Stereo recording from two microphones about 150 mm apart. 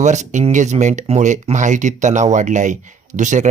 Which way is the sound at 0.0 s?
50° right (ahead or behind).